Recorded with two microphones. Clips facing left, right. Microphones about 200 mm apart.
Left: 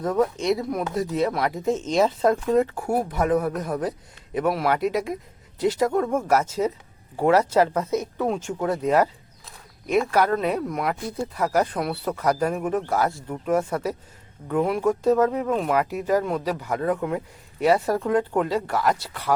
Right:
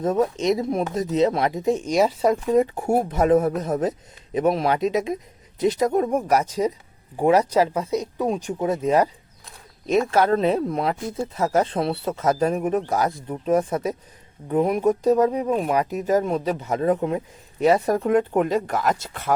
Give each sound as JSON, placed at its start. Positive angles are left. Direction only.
{"t": 0.0, "sound": "speech", "side_deg": -20}